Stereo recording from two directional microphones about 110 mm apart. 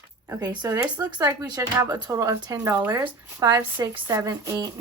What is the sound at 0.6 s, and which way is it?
Speech, 30° right (ahead or behind).